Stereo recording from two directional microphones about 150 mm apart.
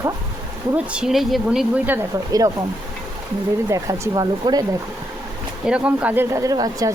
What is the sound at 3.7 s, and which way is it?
Speech, 25° right (ahead or behind).